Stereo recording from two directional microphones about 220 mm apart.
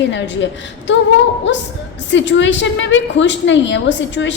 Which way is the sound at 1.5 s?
55° left (ahead or behind).